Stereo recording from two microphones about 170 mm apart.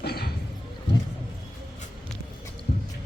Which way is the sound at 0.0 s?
65° left (ahead or behind).